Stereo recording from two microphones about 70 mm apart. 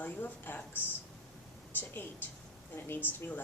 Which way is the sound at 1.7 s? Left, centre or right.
Left.